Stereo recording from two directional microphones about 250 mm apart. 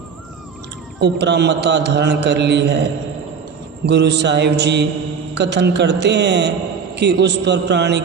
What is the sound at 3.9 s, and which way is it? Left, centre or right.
A man's voice, right.